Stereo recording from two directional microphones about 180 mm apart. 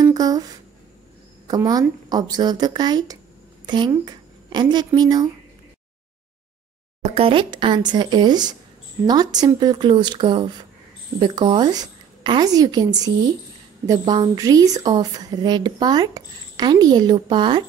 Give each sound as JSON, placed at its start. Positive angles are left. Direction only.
{"t": 0.0, "sound": "a sound", "side_deg": -20}
{"t": 1.5, "sound": "a woman's voice", "side_deg": -20}
{"t": 7.0, "sound": "a woman's voice", "side_deg": -30}